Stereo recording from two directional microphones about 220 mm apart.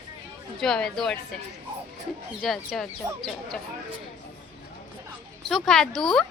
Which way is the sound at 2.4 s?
Centre (ahead or behind).